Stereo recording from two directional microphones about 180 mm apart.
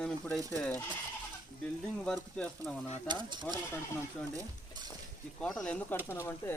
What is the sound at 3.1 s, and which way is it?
Speech, 25° right (ahead or behind).